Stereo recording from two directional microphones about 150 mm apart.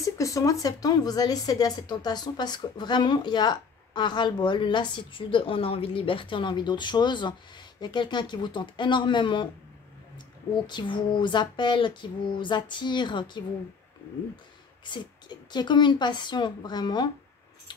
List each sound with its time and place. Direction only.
0.0 s speech: 20° left (ahead or behind)
14.9 s speech: 30° left (ahead or behind)